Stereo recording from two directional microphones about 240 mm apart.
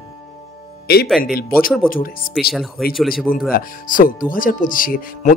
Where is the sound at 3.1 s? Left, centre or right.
Left.